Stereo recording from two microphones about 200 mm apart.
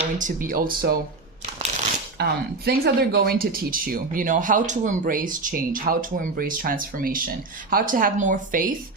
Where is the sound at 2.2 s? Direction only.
55° right (ahead or behind).